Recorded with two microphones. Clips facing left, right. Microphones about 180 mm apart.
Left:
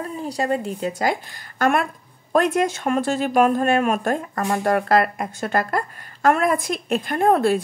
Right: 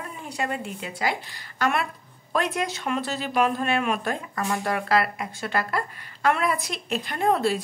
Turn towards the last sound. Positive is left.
turn(degrees=50)  # may be behind; listen again after turning